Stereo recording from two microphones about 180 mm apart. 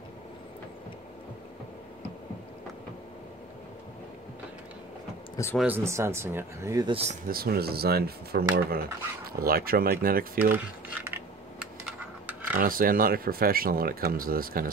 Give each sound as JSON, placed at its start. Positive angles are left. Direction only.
{"t": 5.3, "sound": "a sound", "side_deg": 15}
{"t": 5.6, "sound": "speech", "side_deg": -10}
{"t": 6.9, "sound": "speech", "side_deg": -35}
{"t": 7.2, "sound": "speech", "side_deg": -60}
{"t": 10.5, "sound": "speech", "side_deg": -10}
{"t": 11.6, "sound": "a sound", "side_deg": -5}
{"t": 12.5, "sound": "speech", "side_deg": -50}